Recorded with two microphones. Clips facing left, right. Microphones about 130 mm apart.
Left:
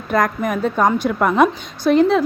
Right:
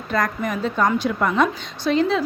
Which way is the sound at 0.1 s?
55° left (ahead or behind).